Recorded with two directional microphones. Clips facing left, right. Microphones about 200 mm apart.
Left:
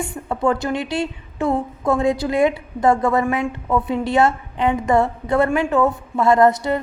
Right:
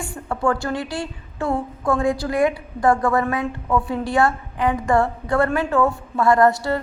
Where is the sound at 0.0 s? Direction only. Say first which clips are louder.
Left 2 dB; 20° left (ahead or behind).